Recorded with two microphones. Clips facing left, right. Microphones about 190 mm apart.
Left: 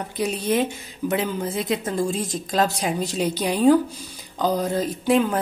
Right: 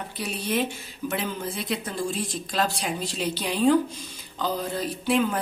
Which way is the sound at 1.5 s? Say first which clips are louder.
Left 5 dB; 90° left.